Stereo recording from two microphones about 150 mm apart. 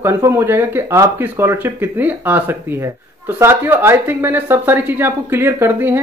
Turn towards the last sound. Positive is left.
turn(degrees=-15)  # may be behind; listen again after turning